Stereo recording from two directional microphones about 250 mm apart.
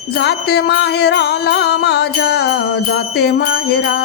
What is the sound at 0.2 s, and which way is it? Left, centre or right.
Music, left.